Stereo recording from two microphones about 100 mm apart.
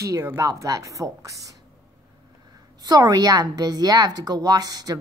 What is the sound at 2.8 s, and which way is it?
A woman's voice, 40° right (ahead or behind).